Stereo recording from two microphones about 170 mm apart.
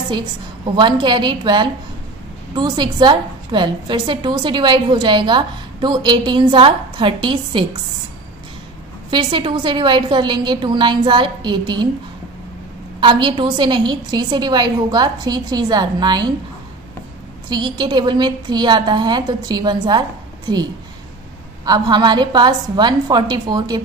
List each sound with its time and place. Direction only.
0.7 s a woman's voice: 25° right (ahead or behind)
9.1 s a woman's voice: 30° right (ahead or behind)
13.0 s a woman's voice: 30° right (ahead or behind)
17.5 s a woman's voice: 25° right (ahead or behind)
21.6 s a woman's voice: 25° right (ahead or behind)